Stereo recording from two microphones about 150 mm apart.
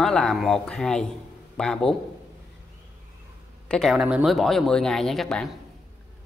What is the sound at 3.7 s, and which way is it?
Speech, 5° left (ahead or behind).